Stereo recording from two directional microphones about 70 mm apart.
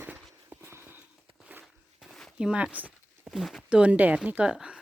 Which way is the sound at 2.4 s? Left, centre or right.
Centre.